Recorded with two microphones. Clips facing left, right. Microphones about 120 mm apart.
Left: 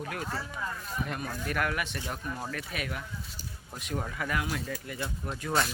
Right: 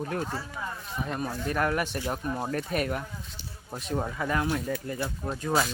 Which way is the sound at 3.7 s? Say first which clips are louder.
Right 5 dB; 30° right (ahead or behind).